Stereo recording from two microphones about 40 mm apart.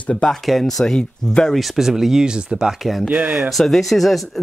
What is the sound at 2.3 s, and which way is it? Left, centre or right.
Speech, right.